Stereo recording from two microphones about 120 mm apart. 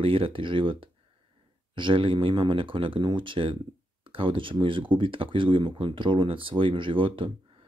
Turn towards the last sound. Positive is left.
turn(degrees=-45)  # may be behind; listen again after turning